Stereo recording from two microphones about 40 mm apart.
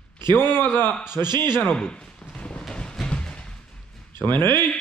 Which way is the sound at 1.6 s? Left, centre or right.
Left.